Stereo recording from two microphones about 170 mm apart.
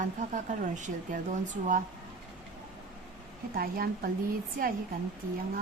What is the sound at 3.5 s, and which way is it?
Speech, 60° right (ahead or behind).